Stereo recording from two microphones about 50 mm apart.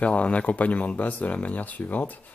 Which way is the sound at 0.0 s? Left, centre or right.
Left.